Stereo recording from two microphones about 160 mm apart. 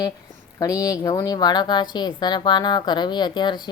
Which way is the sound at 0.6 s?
20° left (ahead or behind).